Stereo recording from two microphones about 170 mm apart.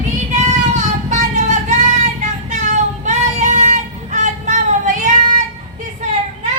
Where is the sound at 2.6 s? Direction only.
45° right (ahead or behind).